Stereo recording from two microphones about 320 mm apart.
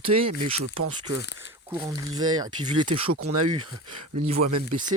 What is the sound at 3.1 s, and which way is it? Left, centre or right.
Speech, right.